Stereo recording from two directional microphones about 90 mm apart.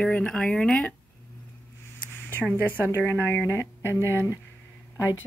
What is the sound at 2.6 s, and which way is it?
Speech, 25° right (ahead or behind).